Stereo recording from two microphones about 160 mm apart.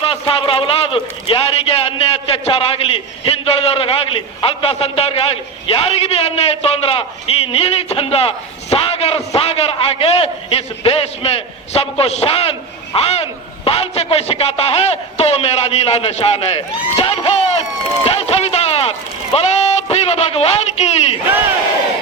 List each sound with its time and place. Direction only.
0.0 s a man's voice: 35° left (ahead or behind)
13.7 s a sound: 40° left (ahead or behind)
18.0 s speech: 40° left (ahead or behind)